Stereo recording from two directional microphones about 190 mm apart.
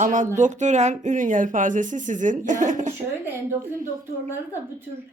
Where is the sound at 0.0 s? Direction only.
40° right (ahead or behind).